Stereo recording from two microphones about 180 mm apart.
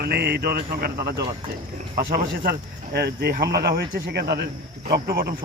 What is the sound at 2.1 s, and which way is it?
Speech, 60° right (ahead or behind).